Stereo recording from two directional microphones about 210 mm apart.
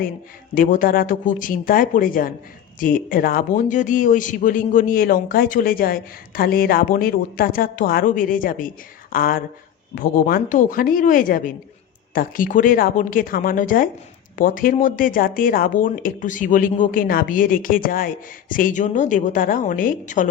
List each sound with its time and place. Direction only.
0.5 s speech: 40° left (ahead or behind)